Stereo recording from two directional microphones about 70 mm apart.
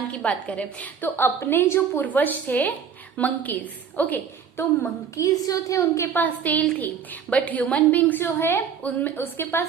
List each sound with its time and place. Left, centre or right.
0.1 s a woman's voice: centre
5.1 s a woman's voice: left
6.1 s a woman's voice: left
9.1 s a woman's voice: left